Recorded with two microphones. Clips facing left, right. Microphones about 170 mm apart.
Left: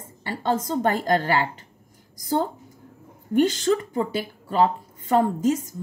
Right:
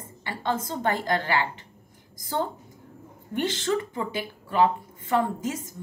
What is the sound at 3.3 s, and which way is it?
Speech, 40° left (ahead or behind).